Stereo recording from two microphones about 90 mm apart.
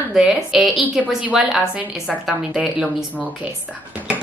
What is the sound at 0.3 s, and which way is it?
Speech, centre (ahead or behind).